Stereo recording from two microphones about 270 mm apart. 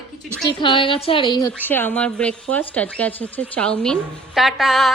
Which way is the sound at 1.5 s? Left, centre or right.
Centre.